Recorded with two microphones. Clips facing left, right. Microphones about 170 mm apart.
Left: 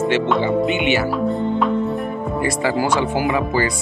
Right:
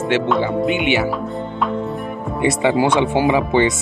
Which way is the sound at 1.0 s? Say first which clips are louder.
Left 3 dB; centre (ahead or behind).